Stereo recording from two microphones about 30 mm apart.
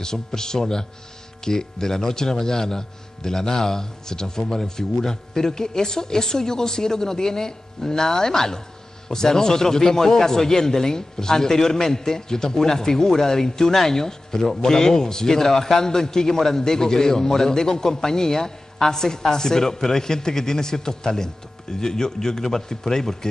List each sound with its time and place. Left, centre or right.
0.0 s a man's voice: left